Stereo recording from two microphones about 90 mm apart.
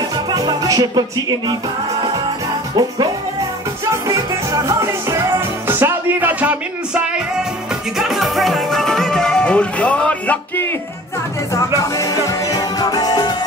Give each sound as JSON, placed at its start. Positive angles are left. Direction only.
{"t": 0.3, "sound": "music", "side_deg": -45}
{"t": 3.9, "sound": "music", "side_deg": -40}
{"t": 5.7, "sound": "speech", "side_deg": -25}
{"t": 8.0, "sound": "music", "side_deg": 0}
{"t": 11.8, "sound": "music", "side_deg": 40}